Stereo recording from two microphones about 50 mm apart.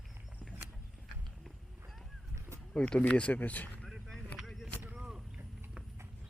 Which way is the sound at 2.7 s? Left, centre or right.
Centre.